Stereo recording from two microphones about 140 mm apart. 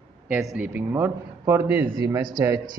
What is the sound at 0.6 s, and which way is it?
Speech, 15° right (ahead or behind).